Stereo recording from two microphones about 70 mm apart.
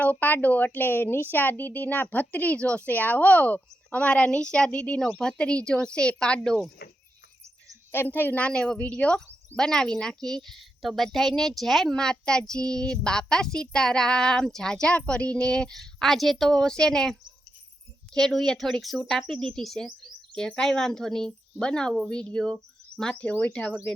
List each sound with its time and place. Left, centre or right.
0.0 s speech: left
4.9 s a woman's voice: centre
5.4 s a woman's voice: centre
7.9 s speech: left
8.4 s a woman's voice: centre